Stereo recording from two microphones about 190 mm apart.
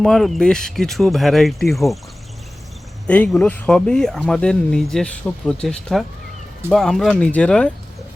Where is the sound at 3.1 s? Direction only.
5° left (ahead or behind).